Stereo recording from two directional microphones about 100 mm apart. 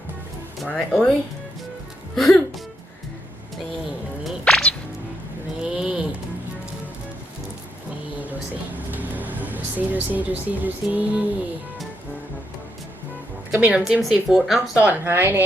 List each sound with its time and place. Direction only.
0.7 s speech: 10° left (ahead or behind)
2.1 s speech: 5° left (ahead or behind)
4.2 s a sound: centre (ahead or behind)
5.6 s a sound: 10° right (ahead or behind)
8.9 s speech: 15° right (ahead or behind)
13.6 s speech: 10° right (ahead or behind)
14.8 s a woman's voice: 15° right (ahead or behind)